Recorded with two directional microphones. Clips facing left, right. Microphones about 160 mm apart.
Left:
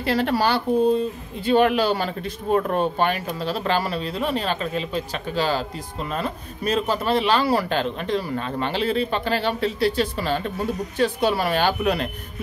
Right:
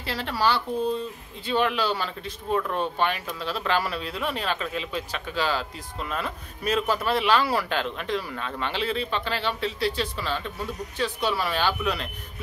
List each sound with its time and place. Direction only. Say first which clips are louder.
0.0 s speech: left 5 dB; 55° left (ahead or behind)